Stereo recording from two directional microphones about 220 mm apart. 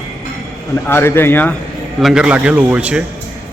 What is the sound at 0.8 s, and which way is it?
Speech, 10° left (ahead or behind).